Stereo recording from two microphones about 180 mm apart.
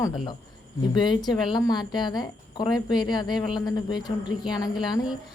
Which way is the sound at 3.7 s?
25° left (ahead or behind).